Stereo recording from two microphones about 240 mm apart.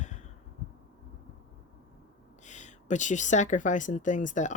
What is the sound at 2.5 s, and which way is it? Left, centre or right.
Speech, left.